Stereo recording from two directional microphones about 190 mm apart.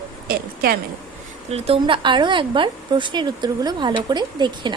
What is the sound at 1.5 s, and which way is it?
A woman's voice, 30° right (ahead or behind).